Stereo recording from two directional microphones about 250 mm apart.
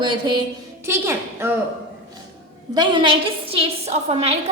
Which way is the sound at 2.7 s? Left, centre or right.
Centre.